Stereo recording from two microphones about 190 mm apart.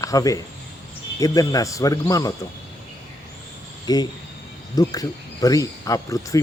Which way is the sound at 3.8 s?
20° left (ahead or behind).